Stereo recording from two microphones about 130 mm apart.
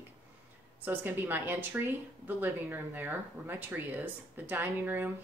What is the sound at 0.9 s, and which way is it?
Speech, 15° right (ahead or behind).